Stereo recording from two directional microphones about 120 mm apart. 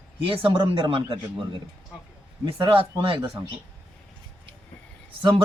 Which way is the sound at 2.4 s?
45° right (ahead or behind).